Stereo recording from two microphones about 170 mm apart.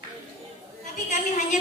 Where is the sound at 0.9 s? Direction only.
45° left (ahead or behind).